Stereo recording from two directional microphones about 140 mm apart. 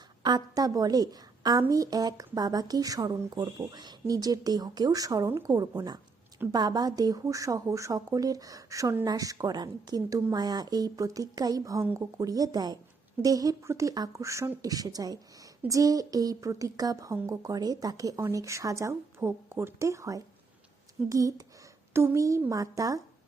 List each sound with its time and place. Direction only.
0.2 s speech: 30° right (ahead or behind)